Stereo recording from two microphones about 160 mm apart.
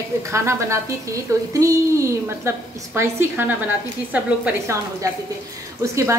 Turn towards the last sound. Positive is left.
turn(degrees=-20)  # may be behind; listen again after turning